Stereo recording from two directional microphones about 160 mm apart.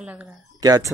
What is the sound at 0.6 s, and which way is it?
Speech, 20° right (ahead or behind).